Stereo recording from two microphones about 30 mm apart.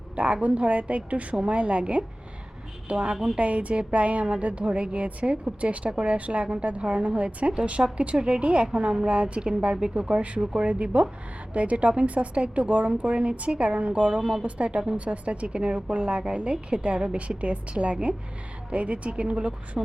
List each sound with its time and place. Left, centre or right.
0.4 s a woman's voice: right
3.3 s a woman's voice: right
5.5 s a woman's voice: right
9.7 s a woman's voice: right
11.5 s speech: right
15.5 s a woman's voice: right